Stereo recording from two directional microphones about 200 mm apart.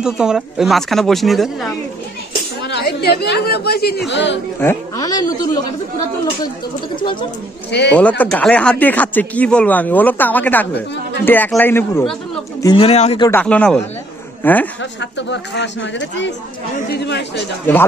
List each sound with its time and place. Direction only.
0.0 s speech: 5° right (ahead or behind)
2.6 s speech: 55° left (ahead or behind)
4.6 s speech: 15° left (ahead or behind)
7.0 s speech: 25° left (ahead or behind)
7.9 s speech: 5° left (ahead or behind)
12.6 s speech: 30° left (ahead or behind)
13.2 s speech: 10° left (ahead or behind)
14.8 s speech: 60° left (ahead or behind)